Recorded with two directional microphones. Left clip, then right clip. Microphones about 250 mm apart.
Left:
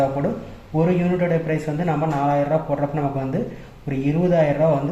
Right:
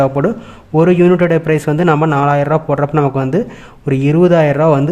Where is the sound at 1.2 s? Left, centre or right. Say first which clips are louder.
Right 9 dB; right.